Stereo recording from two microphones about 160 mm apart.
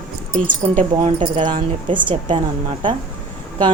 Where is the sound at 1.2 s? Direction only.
30° right (ahead or behind).